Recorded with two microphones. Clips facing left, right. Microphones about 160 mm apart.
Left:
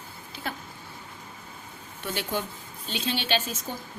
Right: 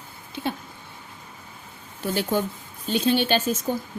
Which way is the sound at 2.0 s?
40° right (ahead or behind).